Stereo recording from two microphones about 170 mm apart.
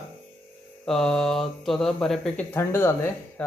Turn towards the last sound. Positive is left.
turn(degrees=15)  # may be behind; listen again after turning